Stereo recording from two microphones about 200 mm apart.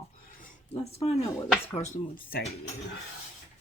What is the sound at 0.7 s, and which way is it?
Speech, 30° left (ahead or behind).